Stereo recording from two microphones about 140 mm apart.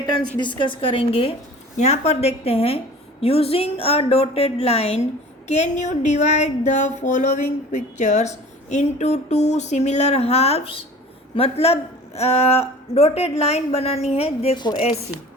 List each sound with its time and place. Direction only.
0.3 s a woman's voice: 35° left (ahead or behind)